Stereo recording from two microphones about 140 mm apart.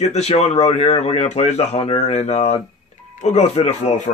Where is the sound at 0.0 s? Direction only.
50° left (ahead or behind).